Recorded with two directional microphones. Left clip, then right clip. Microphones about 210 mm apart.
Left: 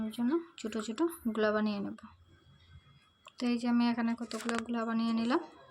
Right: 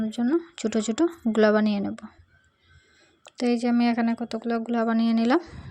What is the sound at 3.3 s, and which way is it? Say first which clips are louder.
Speech: right 9 dB; 30° right (ahead or behind).